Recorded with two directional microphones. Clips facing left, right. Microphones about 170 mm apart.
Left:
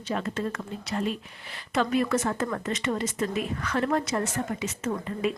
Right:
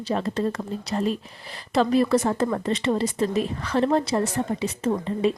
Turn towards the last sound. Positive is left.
turn(degrees=-30)  # may be behind; listen again after turning